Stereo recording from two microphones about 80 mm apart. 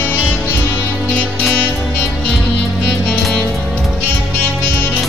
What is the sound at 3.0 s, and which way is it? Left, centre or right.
Music, centre.